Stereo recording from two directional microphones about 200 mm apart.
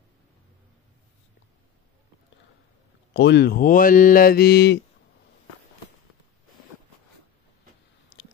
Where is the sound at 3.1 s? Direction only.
60° left (ahead or behind).